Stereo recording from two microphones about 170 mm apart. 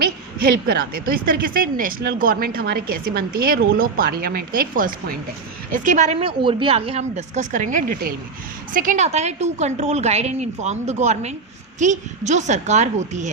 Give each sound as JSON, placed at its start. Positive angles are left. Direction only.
{"t": 0.0, "sound": "a woman's voice", "side_deg": -60}